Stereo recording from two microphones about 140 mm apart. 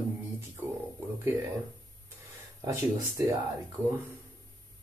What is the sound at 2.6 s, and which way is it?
Speech, 25° right (ahead or behind).